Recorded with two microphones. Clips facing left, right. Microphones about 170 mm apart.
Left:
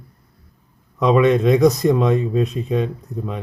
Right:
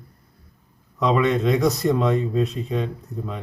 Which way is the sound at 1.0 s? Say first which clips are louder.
Left 5 dB; 20° left (ahead or behind).